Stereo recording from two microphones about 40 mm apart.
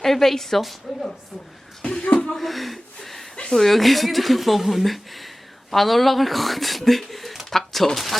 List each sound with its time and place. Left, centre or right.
0.0 s a woman's voice: centre
1.8 s speech: left
2.3 s a sound: centre
3.5 s speech: centre